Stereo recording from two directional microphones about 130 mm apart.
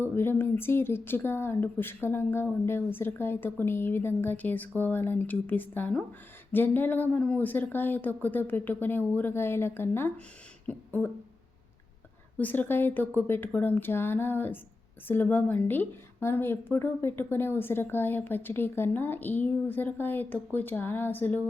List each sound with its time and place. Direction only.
0.0 s a woman's voice: 15° left (ahead or behind)
10.7 s beatboxing: 10° left (ahead or behind)
12.4 s a woman's voice: 15° left (ahead or behind)